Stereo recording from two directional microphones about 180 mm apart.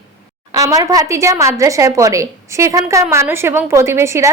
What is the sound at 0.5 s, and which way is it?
A woman's voice, 20° right (ahead or behind).